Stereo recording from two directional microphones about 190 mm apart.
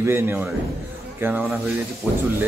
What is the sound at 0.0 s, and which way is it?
Speech, 10° right (ahead or behind).